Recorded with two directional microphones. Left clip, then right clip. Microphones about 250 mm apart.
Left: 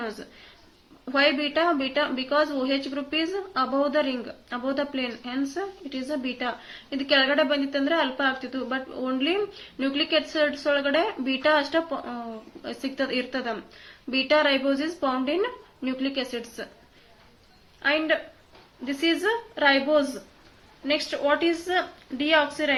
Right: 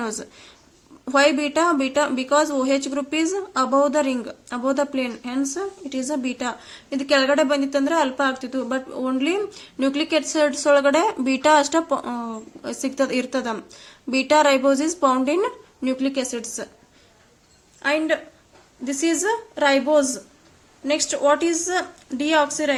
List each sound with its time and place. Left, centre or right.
1.0 s speech: right
17.8 s a woman's voice: right